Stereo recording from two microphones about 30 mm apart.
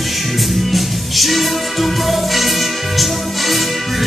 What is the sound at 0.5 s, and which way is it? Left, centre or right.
Music, centre.